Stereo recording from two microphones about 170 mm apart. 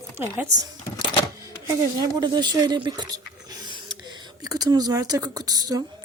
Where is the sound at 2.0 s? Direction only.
25° right (ahead or behind).